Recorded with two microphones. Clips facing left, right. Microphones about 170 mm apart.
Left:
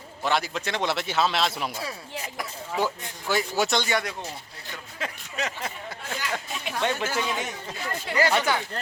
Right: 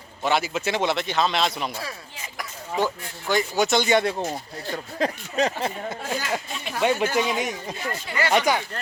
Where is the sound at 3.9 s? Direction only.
25° right (ahead or behind).